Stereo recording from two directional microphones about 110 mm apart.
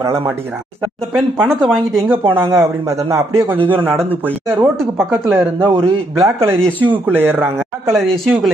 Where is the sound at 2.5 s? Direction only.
25° right (ahead or behind).